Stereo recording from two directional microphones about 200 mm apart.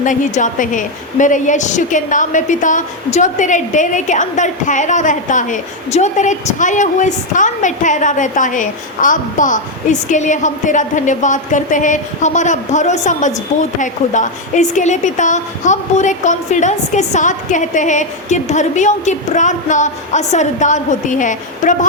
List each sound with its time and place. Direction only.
0.0 s a woman's voice: 40° left (ahead or behind)